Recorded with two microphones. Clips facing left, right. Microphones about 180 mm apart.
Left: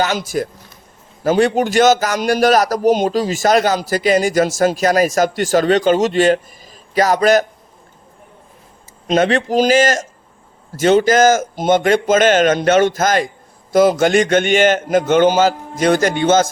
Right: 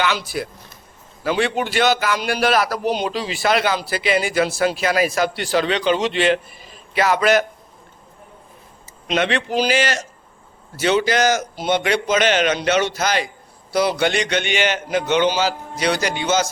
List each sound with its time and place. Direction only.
0.0 s a man's voice: 45° left (ahead or behind)
9.0 s a man's voice: 40° left (ahead or behind)